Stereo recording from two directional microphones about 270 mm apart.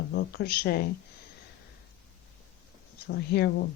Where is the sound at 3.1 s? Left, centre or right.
Left.